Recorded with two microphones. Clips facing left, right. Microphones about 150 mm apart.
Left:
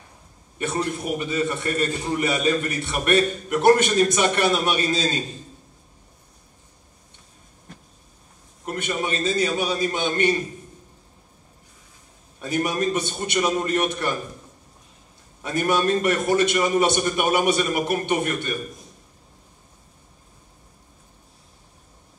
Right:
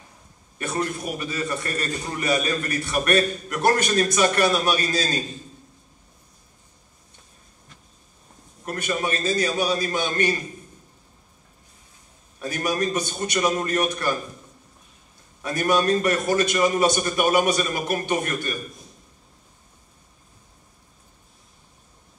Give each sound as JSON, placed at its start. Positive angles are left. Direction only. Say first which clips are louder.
{"t": 0.6, "sound": "a man's voice", "louder": "left 1 dB", "side_deg": 25}
{"t": 8.6, "sound": "a man's voice", "louder": "even", "side_deg": 25}
{"t": 12.4, "sound": "a man's voice", "louder": "left 1 dB", "side_deg": 25}
{"t": 15.4, "sound": "a man's voice", "louder": "even", "side_deg": 25}